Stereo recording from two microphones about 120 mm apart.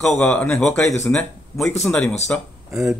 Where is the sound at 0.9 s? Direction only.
25° left (ahead or behind).